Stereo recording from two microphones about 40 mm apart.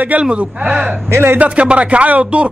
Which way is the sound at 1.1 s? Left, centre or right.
Right.